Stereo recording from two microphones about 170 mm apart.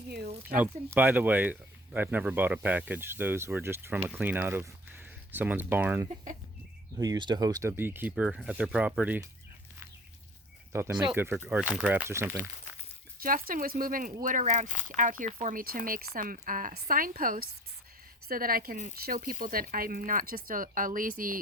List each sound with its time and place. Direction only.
0.4 s speech: 10° right (ahead or behind)
7.0 s speech: 25° right (ahead or behind)
10.7 s speech: 15° right (ahead or behind)
13.1 s speech: 55° right (ahead or behind)